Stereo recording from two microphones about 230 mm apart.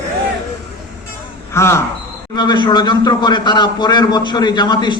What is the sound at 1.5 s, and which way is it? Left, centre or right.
A man's voice, centre.